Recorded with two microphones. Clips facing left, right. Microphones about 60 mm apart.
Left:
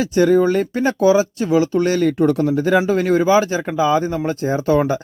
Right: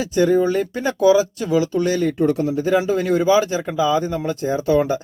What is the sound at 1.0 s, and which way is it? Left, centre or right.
Speech, left.